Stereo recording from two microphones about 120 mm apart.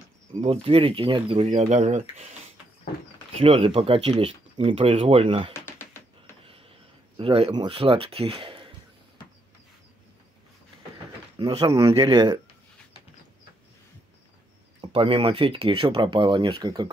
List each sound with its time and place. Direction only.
0.3 s speech: 55° right (ahead or behind)
3.3 s speech: 55° right (ahead or behind)
5.5 s a sound: 20° left (ahead or behind)
7.2 s speech: 50° right (ahead or behind)
11.3 s speech: 35° right (ahead or behind)
14.9 s speech: 50° right (ahead or behind); by 16.9 s 35° right (ahead or behind)